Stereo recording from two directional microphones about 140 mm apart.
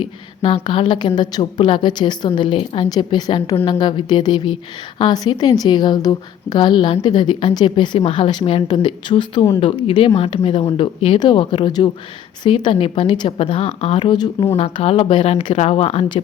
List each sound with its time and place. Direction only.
0.0 s a woman's voice: 40° left (ahead or behind)
14.5 s a woman's voice: 45° left (ahead or behind)